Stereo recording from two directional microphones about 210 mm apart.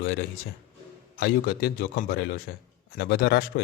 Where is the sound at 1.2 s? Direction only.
50° left (ahead or behind).